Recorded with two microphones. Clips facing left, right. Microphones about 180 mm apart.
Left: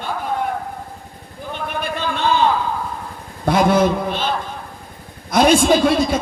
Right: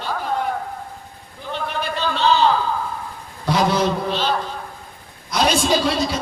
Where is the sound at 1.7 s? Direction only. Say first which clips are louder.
Left 1 dB; 50° left (ahead or behind).